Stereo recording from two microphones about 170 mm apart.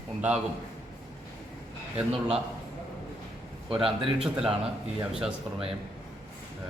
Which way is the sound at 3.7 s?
30° right (ahead or behind).